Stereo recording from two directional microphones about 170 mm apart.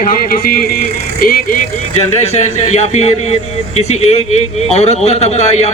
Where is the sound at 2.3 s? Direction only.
40° left (ahead or behind).